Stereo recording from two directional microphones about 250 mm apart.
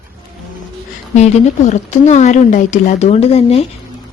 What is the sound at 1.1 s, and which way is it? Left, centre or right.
A woman's voice, left.